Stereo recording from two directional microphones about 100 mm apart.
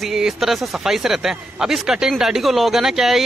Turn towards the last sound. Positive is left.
turn(degrees=-5)  # may be behind; listen again after turning